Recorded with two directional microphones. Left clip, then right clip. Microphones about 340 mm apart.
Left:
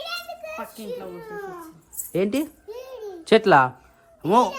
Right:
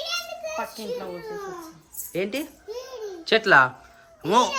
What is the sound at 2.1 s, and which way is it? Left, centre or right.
A child's voice, centre.